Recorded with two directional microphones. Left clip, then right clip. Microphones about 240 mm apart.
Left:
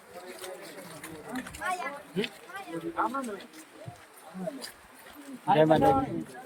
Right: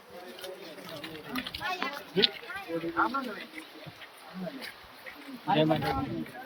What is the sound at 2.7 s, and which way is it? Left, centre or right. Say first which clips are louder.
Speech: right 3 dB; right.